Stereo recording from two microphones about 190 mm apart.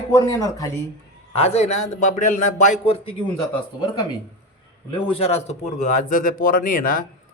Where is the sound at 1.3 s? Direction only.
35° left (ahead or behind).